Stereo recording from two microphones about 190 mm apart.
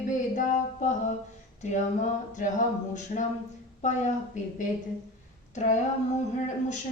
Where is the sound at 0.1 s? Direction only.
40° left (ahead or behind).